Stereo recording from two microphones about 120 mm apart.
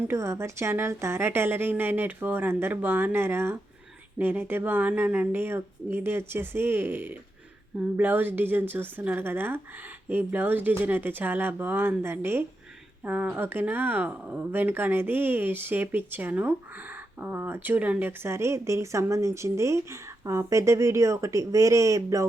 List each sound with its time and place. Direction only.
0.1 s speech: 20° right (ahead or behind)